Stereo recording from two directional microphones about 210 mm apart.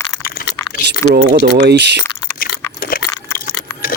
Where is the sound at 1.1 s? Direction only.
35° right (ahead or behind).